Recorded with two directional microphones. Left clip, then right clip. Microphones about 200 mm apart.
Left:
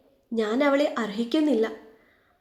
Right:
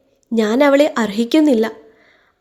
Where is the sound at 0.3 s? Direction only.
50° right (ahead or behind).